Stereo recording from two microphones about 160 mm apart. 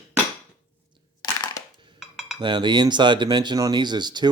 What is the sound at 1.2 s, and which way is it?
Crushing, 25° left (ahead or behind).